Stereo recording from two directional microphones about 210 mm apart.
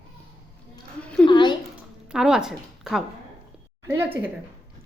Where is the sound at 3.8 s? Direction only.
10° right (ahead or behind).